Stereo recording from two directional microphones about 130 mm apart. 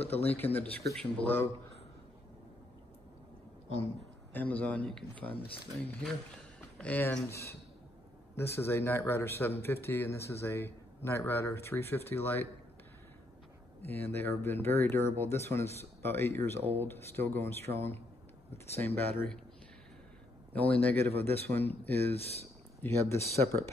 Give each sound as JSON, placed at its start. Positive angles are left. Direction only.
{"t": 0.1, "sound": "speech", "side_deg": 15}
{"t": 4.3, "sound": "speech", "side_deg": 15}
{"t": 13.8, "sound": "speech", "side_deg": 20}
{"t": 18.9, "sound": "speech", "side_deg": 15}
{"t": 20.5, "sound": "speech", "side_deg": 10}
{"t": 22.2, "sound": "speech", "side_deg": 50}
{"t": 22.8, "sound": "speech", "side_deg": 20}